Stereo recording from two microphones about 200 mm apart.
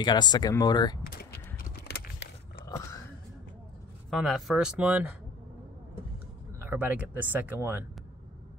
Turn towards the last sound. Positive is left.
turn(degrees=-10)  # may be behind; listen again after turning